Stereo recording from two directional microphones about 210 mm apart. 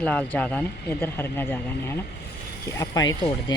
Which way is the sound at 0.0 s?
5° left (ahead or behind).